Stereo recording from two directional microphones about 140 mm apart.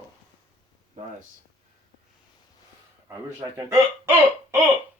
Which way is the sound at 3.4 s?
20° right (ahead or behind).